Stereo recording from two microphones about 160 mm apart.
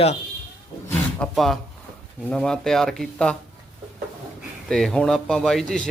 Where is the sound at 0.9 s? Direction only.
5° left (ahead or behind).